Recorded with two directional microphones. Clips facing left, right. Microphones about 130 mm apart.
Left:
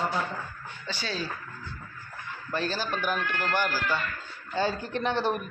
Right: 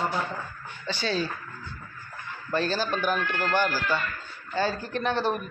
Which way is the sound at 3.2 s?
35° right (ahead or behind).